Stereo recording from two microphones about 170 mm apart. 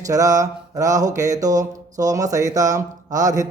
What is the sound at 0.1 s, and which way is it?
Speech, 20° right (ahead or behind).